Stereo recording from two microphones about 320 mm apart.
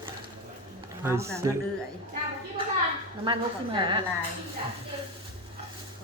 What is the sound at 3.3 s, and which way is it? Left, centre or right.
Speech, centre.